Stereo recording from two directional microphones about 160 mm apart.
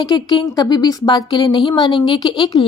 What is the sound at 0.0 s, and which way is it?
Speech, 25° left (ahead or behind).